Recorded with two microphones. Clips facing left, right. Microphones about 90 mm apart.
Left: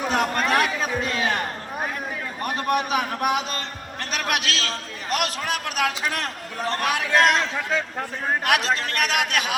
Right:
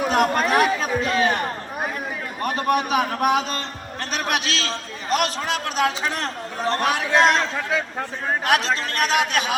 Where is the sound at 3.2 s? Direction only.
35° right (ahead or behind).